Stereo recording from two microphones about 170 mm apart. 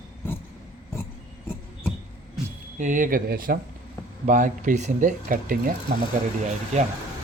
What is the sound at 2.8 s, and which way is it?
Speech, 50° right (ahead or behind).